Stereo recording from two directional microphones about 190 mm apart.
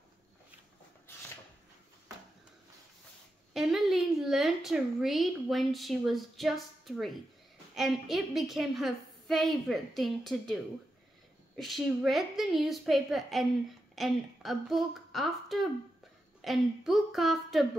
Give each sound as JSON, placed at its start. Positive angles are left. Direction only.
{"t": 3.5, "sound": "a woman's voice", "side_deg": 0}